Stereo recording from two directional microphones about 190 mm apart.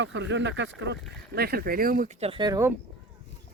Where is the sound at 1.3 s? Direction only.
55° right (ahead or behind); by 2.7 s 20° right (ahead or behind).